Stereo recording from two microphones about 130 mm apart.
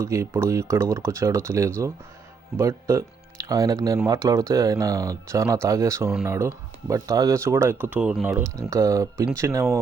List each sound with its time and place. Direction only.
0.0 s speech: 20° right (ahead or behind)